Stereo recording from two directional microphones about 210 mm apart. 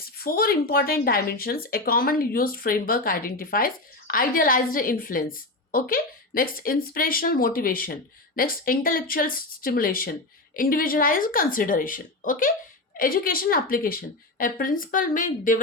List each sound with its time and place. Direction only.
0.2 s speech: 45° left (ahead or behind)